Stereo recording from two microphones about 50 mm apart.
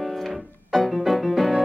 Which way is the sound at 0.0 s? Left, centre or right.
Centre.